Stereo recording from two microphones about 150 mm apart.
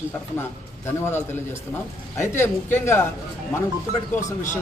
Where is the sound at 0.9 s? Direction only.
15° left (ahead or behind).